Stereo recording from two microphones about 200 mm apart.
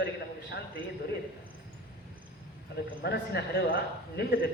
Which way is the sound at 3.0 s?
55° left (ahead or behind).